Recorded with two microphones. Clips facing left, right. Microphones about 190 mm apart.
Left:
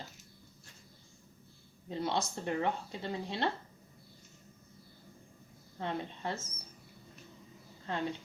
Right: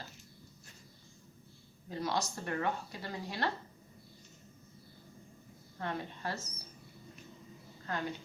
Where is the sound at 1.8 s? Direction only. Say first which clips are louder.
Left 1 dB; 25° left (ahead or behind).